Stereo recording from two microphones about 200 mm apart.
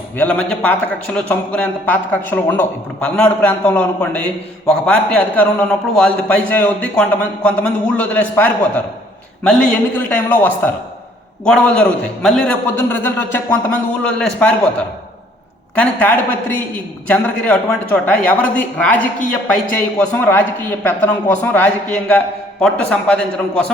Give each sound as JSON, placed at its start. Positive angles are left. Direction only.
{"t": 0.2, "sound": "a man's voice", "side_deg": 5}
{"t": 15.7, "sound": "a man's voice", "side_deg": 5}